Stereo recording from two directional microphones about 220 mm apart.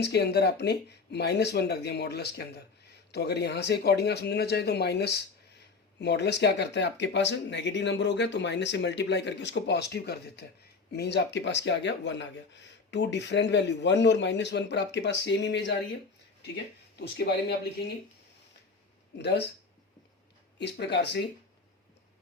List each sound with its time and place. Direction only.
0.0 s speech: 50° left (ahead or behind)
17.0 s speech: 50° left (ahead or behind)
20.6 s speech: 50° left (ahead or behind)